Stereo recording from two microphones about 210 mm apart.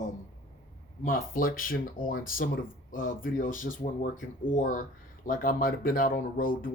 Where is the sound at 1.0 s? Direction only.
40° left (ahead or behind).